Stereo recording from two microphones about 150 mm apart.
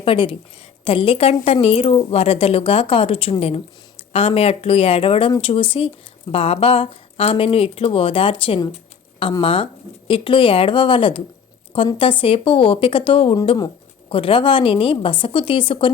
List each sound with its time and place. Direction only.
0.0 s speech: 35° left (ahead or behind)
8.7 s a sound: 40° left (ahead or behind)
9.4 s speech: 35° left (ahead or behind)